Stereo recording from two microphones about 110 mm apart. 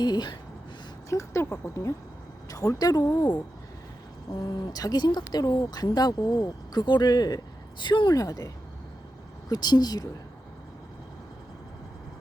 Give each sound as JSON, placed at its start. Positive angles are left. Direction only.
{"t": 0.0, "sound": "speech", "side_deg": 40}
{"t": 1.1, "sound": "speech", "side_deg": 25}